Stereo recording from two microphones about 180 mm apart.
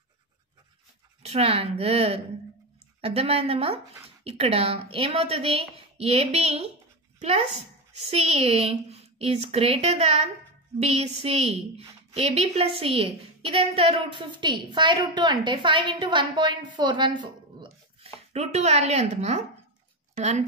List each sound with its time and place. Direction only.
1.2 s a woman's voice: 35° right (ahead or behind)